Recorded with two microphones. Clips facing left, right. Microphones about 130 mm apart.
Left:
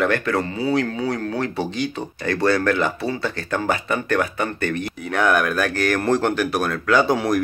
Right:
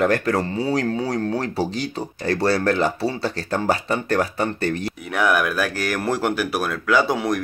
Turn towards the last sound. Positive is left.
turn(degrees=0)  # may be behind; listen again after turning